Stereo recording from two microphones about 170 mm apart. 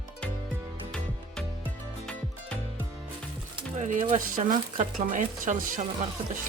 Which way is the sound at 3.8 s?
45° right (ahead or behind).